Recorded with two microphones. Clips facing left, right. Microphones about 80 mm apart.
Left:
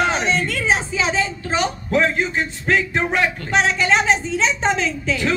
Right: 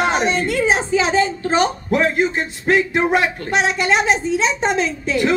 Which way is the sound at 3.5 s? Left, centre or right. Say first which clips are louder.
Even; centre.